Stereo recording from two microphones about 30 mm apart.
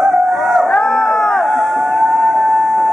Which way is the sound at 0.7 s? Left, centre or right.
Centre.